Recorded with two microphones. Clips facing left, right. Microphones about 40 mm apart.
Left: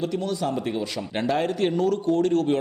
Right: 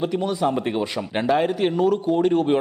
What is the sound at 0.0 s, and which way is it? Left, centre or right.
Speech, right.